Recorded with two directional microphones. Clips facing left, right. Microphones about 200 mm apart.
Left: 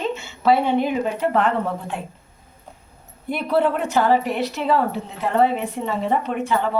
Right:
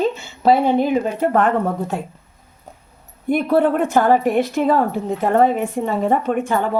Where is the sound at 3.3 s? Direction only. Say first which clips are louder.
Right 4 dB; 50° right (ahead or behind).